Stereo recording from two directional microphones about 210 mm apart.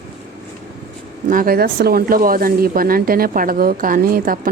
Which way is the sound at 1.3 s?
40° right (ahead or behind).